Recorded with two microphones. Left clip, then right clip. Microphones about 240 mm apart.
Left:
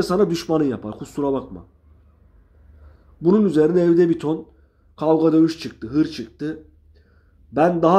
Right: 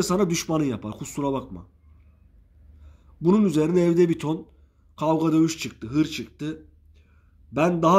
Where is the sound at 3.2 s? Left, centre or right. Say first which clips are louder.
Left 5 dB; right.